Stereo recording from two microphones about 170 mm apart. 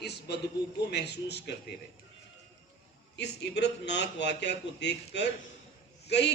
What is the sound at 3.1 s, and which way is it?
A man's voice, 90° left.